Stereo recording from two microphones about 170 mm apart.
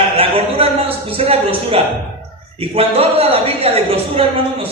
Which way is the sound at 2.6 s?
35° right (ahead or behind).